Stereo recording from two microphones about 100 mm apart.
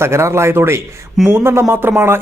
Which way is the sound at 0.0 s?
25° right (ahead or behind).